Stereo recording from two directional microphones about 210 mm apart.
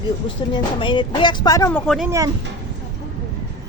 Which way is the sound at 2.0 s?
15° right (ahead or behind).